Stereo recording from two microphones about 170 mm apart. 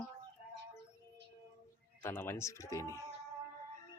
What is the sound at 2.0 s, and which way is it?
Speech, 15° left (ahead or behind).